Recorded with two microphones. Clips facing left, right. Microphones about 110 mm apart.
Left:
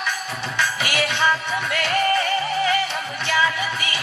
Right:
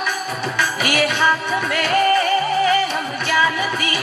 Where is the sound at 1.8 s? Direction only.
35° right (ahead or behind).